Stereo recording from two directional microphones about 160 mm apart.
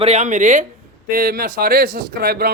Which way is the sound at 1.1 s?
65° right (ahead or behind).